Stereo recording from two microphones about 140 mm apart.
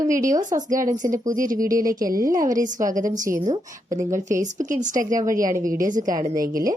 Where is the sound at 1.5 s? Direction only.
75° right (ahead or behind).